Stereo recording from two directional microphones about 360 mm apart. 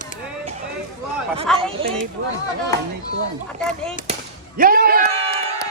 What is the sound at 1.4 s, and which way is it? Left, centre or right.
Speech, centre.